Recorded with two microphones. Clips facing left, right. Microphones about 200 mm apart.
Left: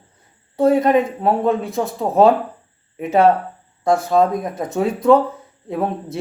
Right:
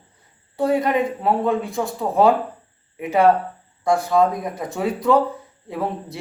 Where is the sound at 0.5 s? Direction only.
20° left (ahead or behind).